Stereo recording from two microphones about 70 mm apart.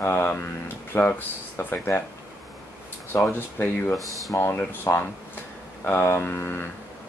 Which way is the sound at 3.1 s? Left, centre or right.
Left.